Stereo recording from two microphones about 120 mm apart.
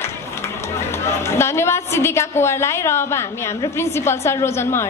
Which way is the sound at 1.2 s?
20° left (ahead or behind).